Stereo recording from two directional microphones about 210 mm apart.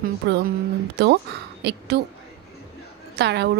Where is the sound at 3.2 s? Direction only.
55° right (ahead or behind).